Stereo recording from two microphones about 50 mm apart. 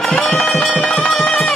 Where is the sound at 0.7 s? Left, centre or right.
Centre.